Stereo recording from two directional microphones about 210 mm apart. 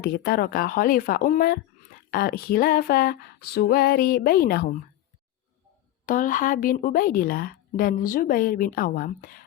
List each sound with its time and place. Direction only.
0.0 s speech: 45° left (ahead or behind)
6.1 s speech: 40° left (ahead or behind)